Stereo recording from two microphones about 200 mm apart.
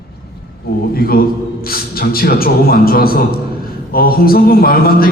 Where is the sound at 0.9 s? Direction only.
50° left (ahead or behind).